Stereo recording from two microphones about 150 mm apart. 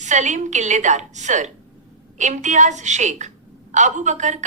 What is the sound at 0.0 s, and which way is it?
A woman's voice, 55° right (ahead or behind).